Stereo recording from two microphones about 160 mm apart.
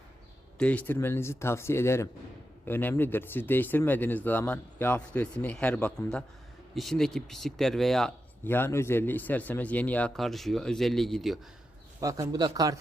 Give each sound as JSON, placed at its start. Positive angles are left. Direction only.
{"t": 0.6, "sound": "speech", "side_deg": 10}
{"t": 8.4, "sound": "speech", "side_deg": 15}
{"t": 11.9, "sound": "a man's voice", "side_deg": -20}